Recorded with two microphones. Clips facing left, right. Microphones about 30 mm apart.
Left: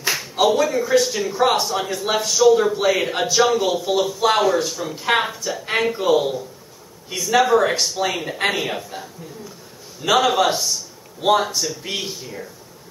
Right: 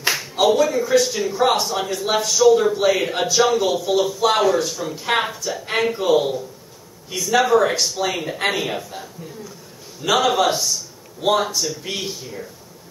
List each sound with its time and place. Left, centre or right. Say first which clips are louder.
0.1 s a sound: even; centre
0.6 s a man's voice: right 1 dB; centre
3.7 s speech: right 1 dB; centre
4.0 s a man's voice: left 1 dB; centre
10.0 s speech: left 1 dB; centre